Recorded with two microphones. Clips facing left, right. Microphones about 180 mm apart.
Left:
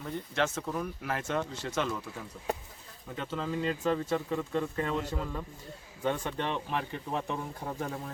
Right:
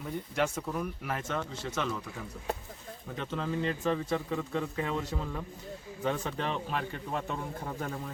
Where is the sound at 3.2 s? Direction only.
5° left (ahead or behind).